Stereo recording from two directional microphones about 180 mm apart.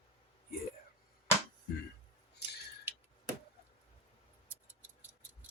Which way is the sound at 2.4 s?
65° left (ahead or behind).